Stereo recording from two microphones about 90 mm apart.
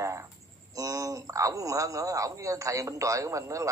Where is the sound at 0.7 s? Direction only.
40° right (ahead or behind).